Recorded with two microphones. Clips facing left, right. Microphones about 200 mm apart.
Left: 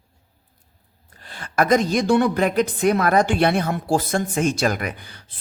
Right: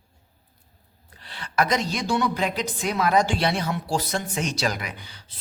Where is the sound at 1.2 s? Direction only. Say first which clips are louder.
Left 3 dB; 45° left (ahead or behind).